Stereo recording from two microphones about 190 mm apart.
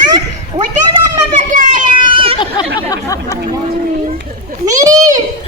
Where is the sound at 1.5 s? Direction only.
40° right (ahead or behind).